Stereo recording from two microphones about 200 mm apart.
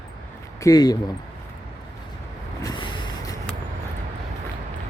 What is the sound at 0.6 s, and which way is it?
Speech, 20° left (ahead or behind).